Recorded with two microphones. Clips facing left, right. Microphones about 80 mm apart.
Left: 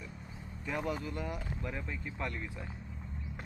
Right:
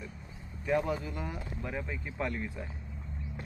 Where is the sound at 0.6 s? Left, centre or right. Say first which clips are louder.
Right 6 dB; centre.